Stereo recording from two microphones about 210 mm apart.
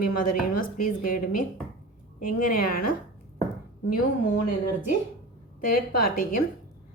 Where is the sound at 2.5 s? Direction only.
40° left (ahead or behind).